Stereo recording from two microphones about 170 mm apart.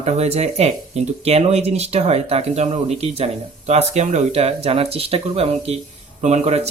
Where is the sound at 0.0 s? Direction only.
40° right (ahead or behind).